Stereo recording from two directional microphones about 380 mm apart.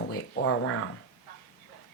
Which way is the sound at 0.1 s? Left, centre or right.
Left.